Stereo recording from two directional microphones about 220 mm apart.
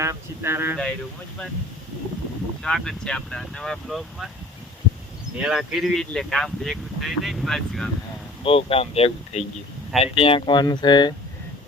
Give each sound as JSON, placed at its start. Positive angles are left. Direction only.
{"t": 0.0, "sound": "speech", "side_deg": -10}
{"t": 2.6, "sound": "speech", "side_deg": 5}
{"t": 5.4, "sound": "speech", "side_deg": -5}
{"t": 8.4, "sound": "speech", "side_deg": 25}